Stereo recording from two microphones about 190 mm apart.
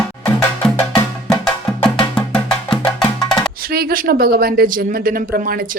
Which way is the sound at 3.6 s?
50° right (ahead or behind).